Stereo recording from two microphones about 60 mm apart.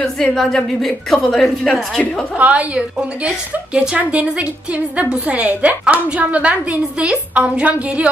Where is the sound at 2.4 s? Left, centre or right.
Right.